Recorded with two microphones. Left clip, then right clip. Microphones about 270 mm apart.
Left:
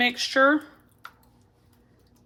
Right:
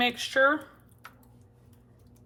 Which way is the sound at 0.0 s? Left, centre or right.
Left.